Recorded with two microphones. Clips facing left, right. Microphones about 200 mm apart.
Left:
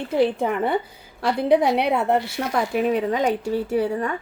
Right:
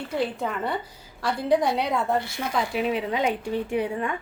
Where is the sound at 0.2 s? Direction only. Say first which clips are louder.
Left 8 dB; 60° left (ahead or behind).